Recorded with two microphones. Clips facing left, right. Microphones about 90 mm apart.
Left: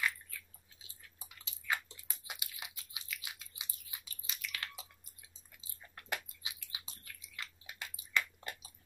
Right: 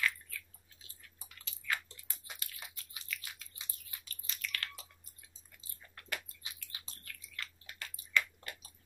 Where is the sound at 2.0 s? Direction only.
15° left (ahead or behind).